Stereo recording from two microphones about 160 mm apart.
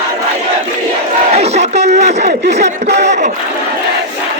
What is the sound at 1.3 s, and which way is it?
Speech, 40° right (ahead or behind).